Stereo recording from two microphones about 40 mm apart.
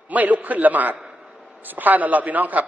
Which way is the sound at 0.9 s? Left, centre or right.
Right.